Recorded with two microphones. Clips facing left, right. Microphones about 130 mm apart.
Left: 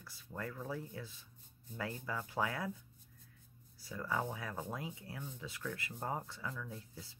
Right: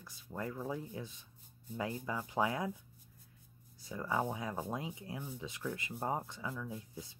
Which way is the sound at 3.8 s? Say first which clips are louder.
Right 3 dB; 20° right (ahead or behind).